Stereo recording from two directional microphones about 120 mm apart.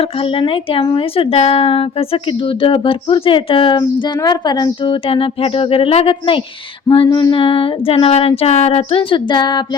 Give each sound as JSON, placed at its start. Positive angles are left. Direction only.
{"t": 0.0, "sound": "speech", "side_deg": 50}